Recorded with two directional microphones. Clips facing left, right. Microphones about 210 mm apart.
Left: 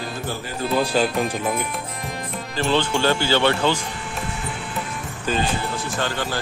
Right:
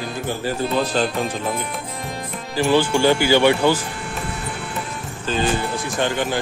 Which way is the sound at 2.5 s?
10° right (ahead or behind).